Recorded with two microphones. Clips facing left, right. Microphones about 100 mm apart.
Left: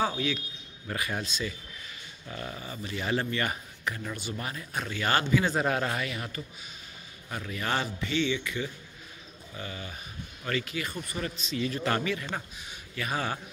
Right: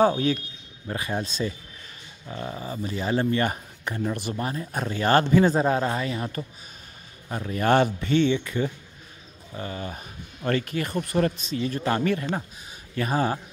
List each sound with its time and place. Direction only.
0.0 s speech: 40° right (ahead or behind)
0.8 s speech: 30° right (ahead or behind)
2.2 s speech: 25° right (ahead or behind)
7.6 s speech: 50° right (ahead or behind)
11.5 s speech: 35° right (ahead or behind)
12.9 s speech: 35° right (ahead or behind)